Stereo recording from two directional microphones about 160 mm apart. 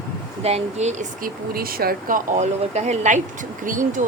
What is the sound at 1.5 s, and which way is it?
Speech, 65° right (ahead or behind).